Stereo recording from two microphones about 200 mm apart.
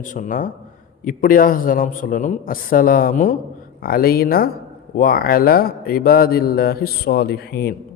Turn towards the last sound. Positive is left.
turn(degrees=50)  # may be behind; listen again after turning